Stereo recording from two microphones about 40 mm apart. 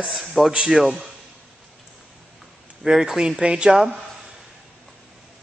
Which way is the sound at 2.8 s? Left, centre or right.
Centre.